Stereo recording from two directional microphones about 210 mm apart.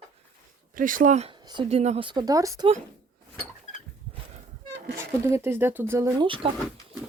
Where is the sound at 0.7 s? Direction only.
40° right (ahead or behind); by 2.7 s 15° right (ahead or behind).